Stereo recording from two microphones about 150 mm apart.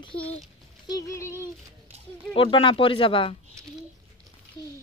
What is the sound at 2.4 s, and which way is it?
Speech, 35° left (ahead or behind).